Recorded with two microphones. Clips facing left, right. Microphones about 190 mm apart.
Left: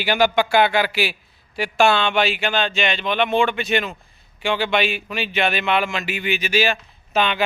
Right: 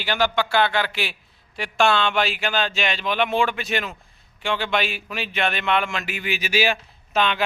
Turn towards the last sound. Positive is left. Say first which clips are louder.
# left 2 dB
turn(degrees=5)  # may be behind; listen again after turning